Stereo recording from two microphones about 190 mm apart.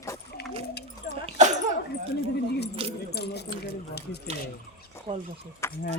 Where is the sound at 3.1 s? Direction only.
60° left (ahead or behind).